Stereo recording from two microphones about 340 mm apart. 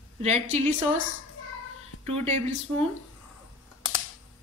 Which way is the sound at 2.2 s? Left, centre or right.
Centre.